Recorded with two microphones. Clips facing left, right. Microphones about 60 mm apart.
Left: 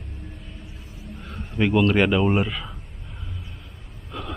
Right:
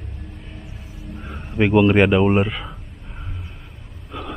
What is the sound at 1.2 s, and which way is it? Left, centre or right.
Speech, centre.